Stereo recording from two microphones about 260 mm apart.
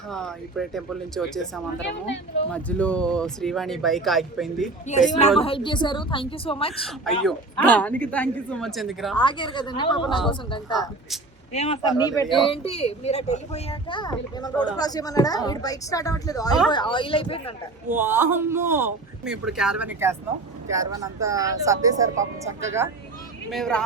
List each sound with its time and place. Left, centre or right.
0.1 s a woman's voice: centre
4.9 s a child's voice: left
6.8 s a woman's voice: centre
9.1 s a woman's voice: centre
11.5 s a woman's voice: left
17.8 s speech: centre
23.5 s a woman's voice: centre